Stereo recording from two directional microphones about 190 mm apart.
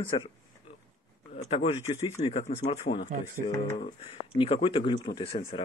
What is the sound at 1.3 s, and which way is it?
Speech, 35° left (ahead or behind).